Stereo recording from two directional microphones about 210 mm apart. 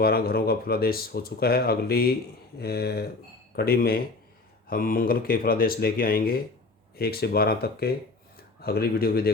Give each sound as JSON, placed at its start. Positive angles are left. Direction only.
{"t": 0.0, "sound": "speech", "side_deg": 45}